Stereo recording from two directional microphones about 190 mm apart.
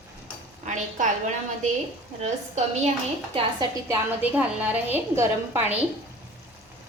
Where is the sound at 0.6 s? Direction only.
40° right (ahead or behind).